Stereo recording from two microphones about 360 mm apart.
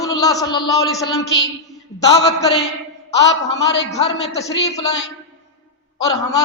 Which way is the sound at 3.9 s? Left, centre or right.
Centre.